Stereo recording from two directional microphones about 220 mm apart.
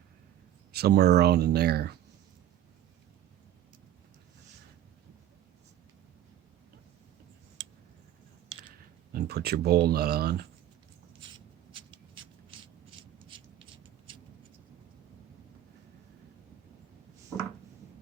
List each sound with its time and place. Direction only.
0.7 s speech: 45° right (ahead or behind)
9.1 s speech: 45° right (ahead or behind)
11.7 s a sound: 25° right (ahead or behind)